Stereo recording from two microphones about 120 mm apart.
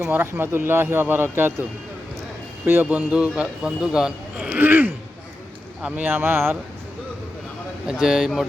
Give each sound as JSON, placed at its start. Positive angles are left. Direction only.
{"t": 0.1, "sound": "speech", "side_deg": -20}
{"t": 2.6, "sound": "a man's voice", "side_deg": -15}
{"t": 7.9, "sound": "speech", "side_deg": -5}